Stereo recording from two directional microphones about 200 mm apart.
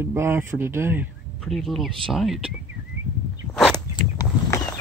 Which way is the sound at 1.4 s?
Centre (ahead or behind).